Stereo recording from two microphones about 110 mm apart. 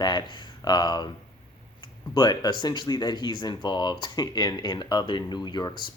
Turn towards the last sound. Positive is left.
turn(degrees=40)  # may be behind; listen again after turning